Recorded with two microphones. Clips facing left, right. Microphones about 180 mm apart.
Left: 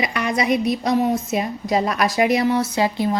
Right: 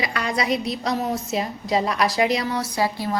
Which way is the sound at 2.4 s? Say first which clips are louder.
Left 5 dB; 25° left (ahead or behind).